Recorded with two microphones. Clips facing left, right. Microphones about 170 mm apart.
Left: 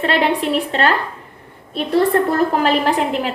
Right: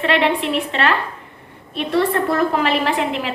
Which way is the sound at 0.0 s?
40° left (ahead or behind).